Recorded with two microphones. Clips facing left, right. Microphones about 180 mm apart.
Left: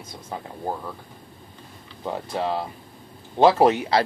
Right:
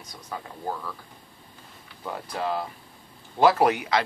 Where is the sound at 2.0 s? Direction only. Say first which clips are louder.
Left 3 dB; 25° left (ahead or behind).